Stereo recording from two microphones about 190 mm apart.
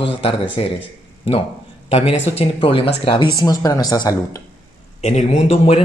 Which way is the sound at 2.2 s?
30° left (ahead or behind).